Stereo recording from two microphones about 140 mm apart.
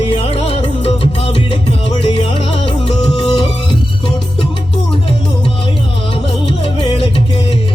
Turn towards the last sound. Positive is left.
turn(degrees=40)  # may be behind; listen again after turning